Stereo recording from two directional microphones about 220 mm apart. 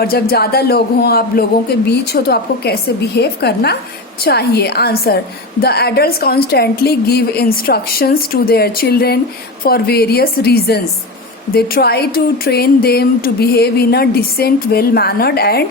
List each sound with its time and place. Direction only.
0.0 s speech: 45° left (ahead or behind)